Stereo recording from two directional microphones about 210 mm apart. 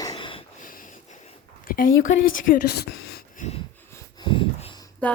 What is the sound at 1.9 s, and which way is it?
Speech, 65° left (ahead or behind).